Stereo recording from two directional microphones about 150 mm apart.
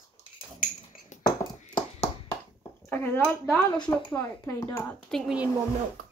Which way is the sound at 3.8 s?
20° left (ahead or behind).